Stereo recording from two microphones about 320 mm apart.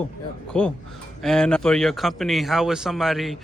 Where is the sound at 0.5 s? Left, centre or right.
Centre.